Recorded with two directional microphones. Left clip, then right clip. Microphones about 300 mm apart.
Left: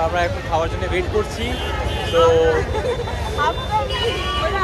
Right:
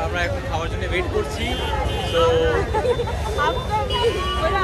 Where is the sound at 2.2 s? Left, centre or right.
Centre.